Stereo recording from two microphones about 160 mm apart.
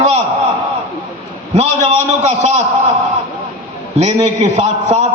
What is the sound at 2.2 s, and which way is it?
Speech, 40° right (ahead or behind).